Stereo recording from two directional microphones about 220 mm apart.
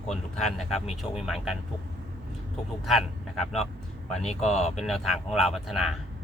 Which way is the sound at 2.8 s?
Centre (ahead or behind).